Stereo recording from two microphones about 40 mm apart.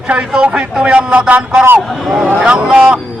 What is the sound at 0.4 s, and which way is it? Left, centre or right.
Speech, right.